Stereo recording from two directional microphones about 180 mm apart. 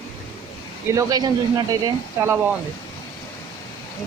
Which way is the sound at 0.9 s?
20° right (ahead or behind).